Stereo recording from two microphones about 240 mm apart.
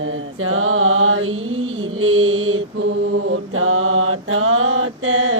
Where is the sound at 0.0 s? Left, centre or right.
Right.